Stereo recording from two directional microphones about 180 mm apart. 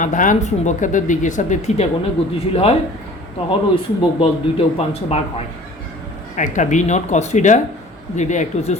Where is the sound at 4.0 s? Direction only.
30° left (ahead or behind).